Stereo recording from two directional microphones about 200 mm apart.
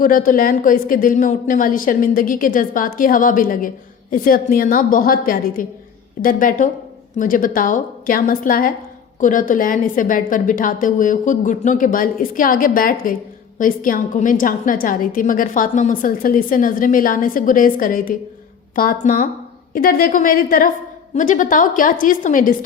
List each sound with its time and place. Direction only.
0.0 s a woman's voice: 45° left (ahead or behind)